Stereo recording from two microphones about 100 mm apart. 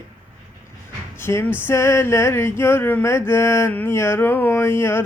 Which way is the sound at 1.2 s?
25° left (ahead or behind).